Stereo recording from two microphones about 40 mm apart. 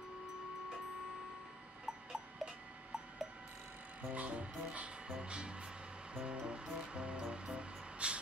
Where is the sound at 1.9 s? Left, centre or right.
Centre.